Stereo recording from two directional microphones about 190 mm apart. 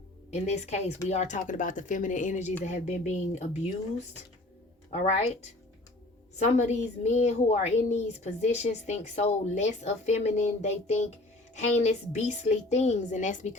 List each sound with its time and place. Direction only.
0.3 s a woman's voice: 35° left (ahead or behind)
6.3 s a woman's voice: 40° left (ahead or behind)